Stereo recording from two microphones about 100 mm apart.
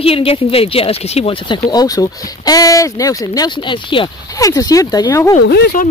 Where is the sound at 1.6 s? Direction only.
40° left (ahead or behind).